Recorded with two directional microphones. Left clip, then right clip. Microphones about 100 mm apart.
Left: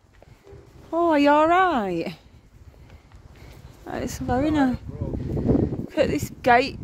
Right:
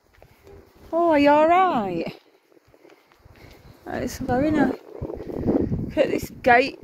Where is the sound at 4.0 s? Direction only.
15° left (ahead or behind).